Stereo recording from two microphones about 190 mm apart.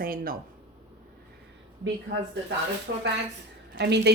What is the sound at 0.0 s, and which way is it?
Speech, 50° right (ahead or behind).